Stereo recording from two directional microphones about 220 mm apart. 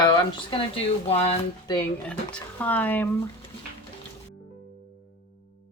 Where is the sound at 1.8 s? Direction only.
5° left (ahead or behind).